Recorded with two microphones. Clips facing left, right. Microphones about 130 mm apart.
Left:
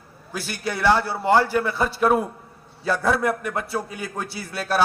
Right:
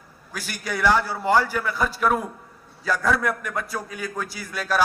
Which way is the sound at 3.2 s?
30° left (ahead or behind).